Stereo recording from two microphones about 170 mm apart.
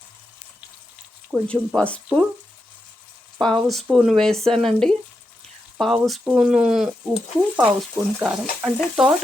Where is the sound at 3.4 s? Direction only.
5° left (ahead or behind).